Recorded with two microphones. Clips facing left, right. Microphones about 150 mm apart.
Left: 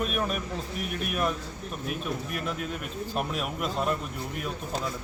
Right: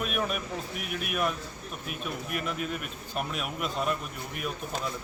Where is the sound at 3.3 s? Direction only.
Centre (ahead or behind).